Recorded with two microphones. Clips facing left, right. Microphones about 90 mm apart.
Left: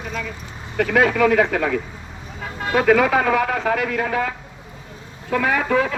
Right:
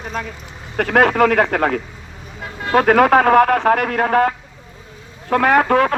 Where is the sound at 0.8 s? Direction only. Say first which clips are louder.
Right 3 dB; 55° right (ahead or behind).